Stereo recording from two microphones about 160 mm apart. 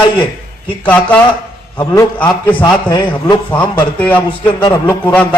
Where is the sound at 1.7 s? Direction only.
25° left (ahead or behind).